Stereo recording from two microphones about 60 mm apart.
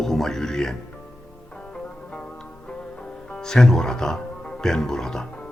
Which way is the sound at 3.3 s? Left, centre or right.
Centre.